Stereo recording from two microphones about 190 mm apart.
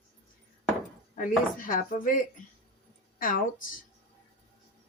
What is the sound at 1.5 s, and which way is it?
A woman's voice, 45° left (ahead or behind).